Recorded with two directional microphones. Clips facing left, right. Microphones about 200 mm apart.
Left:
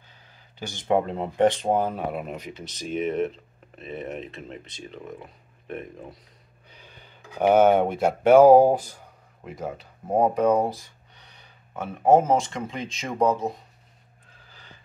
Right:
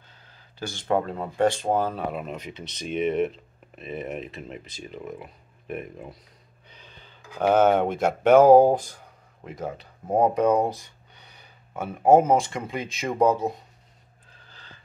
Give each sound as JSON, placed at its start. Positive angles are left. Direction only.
{"t": 0.3, "sound": "speech", "side_deg": 15}
{"t": 6.7, "sound": "speech", "side_deg": 10}
{"t": 11.7, "sound": "speech", "side_deg": -10}